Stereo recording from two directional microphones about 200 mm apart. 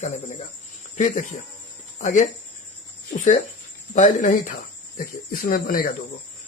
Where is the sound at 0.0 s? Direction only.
35° left (ahead or behind).